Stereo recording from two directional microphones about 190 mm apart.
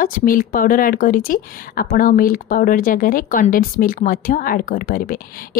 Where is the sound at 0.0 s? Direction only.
45° left (ahead or behind).